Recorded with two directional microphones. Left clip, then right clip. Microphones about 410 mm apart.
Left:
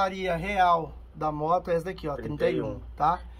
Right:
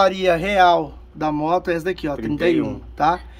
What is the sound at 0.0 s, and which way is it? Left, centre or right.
Speech, centre.